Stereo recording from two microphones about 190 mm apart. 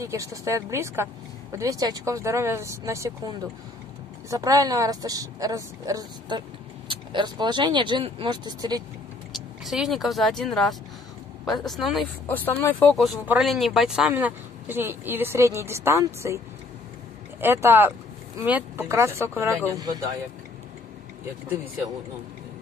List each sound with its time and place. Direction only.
0.0 s speech: 15° right (ahead or behind)
4.3 s a woman's voice: 20° right (ahead or behind)
9.3 s speech: centre (ahead or behind)
12.3 s speech: 10° left (ahead or behind); by 16.3 s 15° right (ahead or behind)
17.4 s speech: 10° right (ahead or behind)